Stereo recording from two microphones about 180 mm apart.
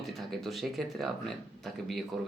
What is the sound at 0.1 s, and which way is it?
Speech, centre (ahead or behind).